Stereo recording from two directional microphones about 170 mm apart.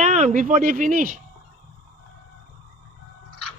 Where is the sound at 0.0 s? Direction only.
45° right (ahead or behind).